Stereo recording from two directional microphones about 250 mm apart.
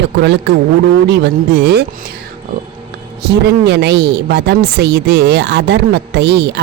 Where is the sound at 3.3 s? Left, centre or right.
Right.